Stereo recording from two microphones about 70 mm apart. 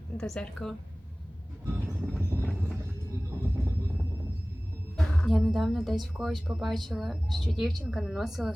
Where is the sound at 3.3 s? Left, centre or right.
Right.